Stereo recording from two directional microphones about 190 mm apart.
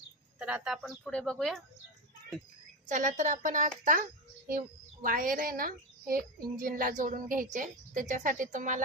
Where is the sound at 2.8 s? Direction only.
40° right (ahead or behind).